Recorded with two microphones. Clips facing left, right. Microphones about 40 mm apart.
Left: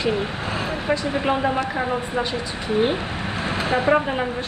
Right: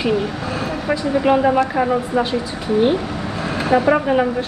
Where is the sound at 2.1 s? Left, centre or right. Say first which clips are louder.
Right 5 dB; left.